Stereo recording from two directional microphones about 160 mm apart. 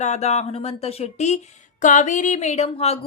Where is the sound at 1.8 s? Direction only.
50° left (ahead or behind).